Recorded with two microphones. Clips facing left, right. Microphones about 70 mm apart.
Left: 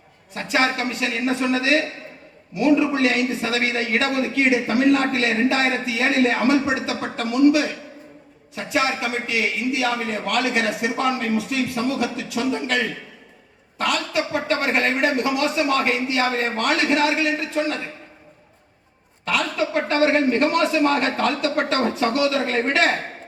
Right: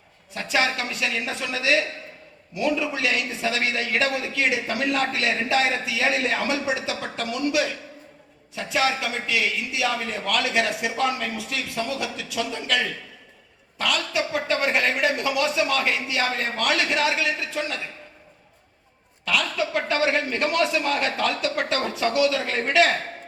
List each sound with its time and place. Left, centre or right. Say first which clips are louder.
0.3 s a man's voice: left 3 dB; left
19.2 s a man's voice: left 2 dB; left